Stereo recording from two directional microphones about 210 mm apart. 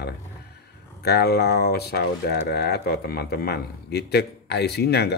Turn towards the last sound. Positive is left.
turn(degrees=50)  # may be behind; listen again after turning